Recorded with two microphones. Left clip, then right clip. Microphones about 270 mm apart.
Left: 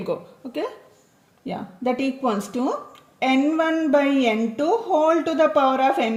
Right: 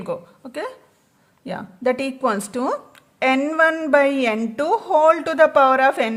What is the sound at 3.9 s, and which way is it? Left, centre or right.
A woman's voice, right.